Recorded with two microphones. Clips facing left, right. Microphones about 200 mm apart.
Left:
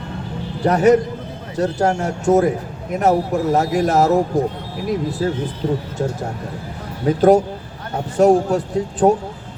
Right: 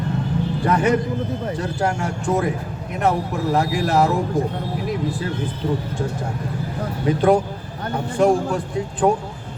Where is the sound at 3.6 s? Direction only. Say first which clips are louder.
Left 1 dB; 40° left (ahead or behind).